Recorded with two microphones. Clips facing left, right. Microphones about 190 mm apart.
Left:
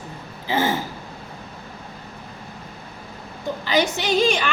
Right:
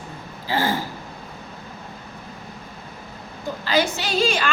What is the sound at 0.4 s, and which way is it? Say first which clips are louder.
Speech: left 1 dB; 20° left (ahead or behind).